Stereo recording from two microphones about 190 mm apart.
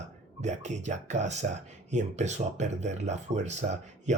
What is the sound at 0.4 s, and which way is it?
Speech, 35° right (ahead or behind).